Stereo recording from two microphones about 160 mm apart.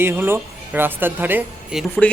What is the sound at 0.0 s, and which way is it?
A woman's voice, 15° right (ahead or behind).